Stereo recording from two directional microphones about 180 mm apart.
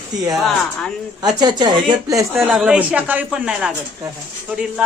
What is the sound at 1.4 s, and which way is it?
Speech, 25° right (ahead or behind).